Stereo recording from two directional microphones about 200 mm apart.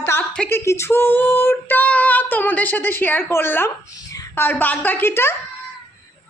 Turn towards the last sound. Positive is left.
turn(degrees=10)  # may be behind; listen again after turning